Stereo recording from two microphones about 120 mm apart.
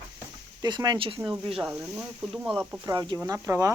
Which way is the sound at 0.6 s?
35° right (ahead or behind).